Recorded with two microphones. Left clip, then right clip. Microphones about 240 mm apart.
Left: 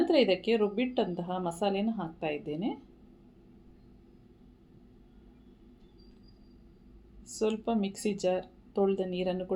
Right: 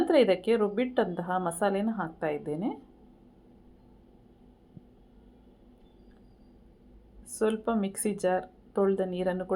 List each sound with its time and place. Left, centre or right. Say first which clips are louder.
0.0 s a woman's voice: right 2 dB; centre
7.3 s a woman's voice: right 2 dB; centre